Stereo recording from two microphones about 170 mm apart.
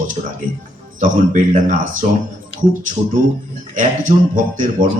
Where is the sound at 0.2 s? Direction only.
45° right (ahead or behind).